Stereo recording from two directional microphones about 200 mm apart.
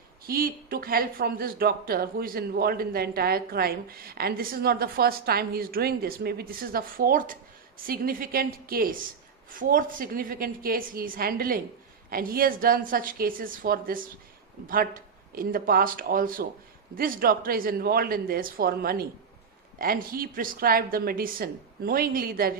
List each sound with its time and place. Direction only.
0.3 s speech: 45° right (ahead or behind)